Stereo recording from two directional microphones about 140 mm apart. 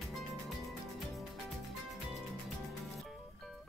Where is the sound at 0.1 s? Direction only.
Centre (ahead or behind).